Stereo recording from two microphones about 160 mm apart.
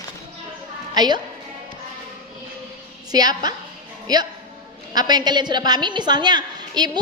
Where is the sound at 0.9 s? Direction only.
25° right (ahead or behind).